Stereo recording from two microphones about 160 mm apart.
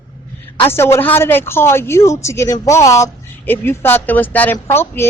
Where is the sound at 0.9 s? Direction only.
15° left (ahead or behind).